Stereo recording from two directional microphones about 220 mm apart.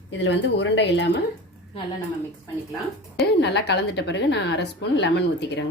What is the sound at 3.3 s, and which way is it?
A woman's voice, 50° left (ahead or behind).